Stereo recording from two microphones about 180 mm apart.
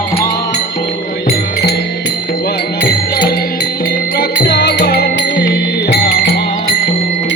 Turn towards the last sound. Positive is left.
turn(degrees=65)  # may be behind; listen again after turning